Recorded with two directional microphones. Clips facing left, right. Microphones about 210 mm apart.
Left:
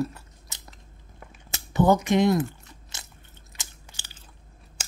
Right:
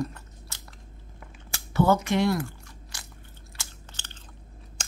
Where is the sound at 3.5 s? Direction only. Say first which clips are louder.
Even; 15° left (ahead or behind).